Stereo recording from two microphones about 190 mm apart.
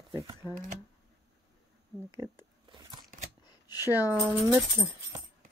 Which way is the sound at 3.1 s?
40° right (ahead or behind).